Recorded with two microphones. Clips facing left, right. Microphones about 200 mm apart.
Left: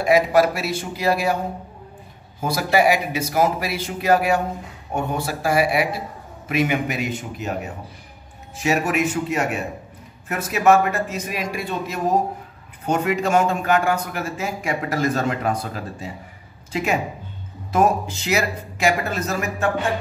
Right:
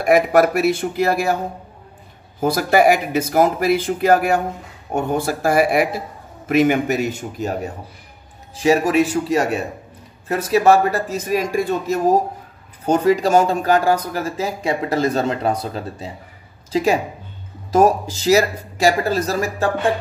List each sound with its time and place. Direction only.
0.0 s a man's voice: 50° right (ahead or behind)
2.4 s a man's voice: 50° right (ahead or behind); by 19.7 s 35° right (ahead or behind)